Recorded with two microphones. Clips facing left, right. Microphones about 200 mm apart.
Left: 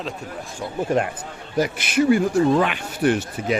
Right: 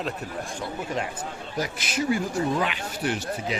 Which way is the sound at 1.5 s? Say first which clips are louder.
Left 9 dB; 60° left (ahead or behind).